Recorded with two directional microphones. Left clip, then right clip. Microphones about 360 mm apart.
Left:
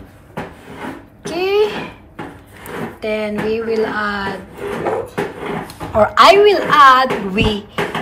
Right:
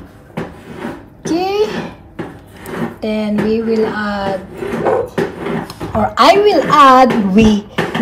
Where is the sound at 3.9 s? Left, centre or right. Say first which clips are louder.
Right 2 dB; centre.